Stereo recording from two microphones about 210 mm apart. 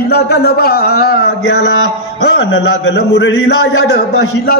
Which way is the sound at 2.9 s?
55° left (ahead or behind).